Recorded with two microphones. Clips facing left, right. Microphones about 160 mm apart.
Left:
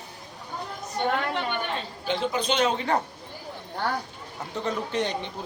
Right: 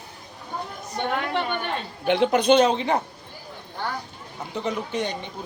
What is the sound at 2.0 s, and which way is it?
Speech, 65° right (ahead or behind).